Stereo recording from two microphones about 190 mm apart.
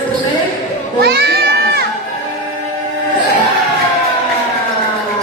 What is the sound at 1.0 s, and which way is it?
Crowd, 55° right (ahead or behind).